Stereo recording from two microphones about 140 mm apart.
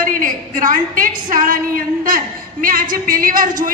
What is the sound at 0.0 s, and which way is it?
A woman's voice, 80° right.